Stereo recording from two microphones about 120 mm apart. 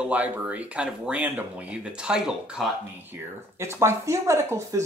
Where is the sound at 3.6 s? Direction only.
20° right (ahead or behind).